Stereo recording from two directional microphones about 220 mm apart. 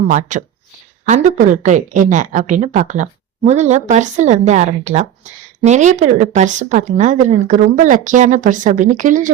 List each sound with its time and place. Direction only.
0.1 s a woman's voice: 35° right (ahead or behind)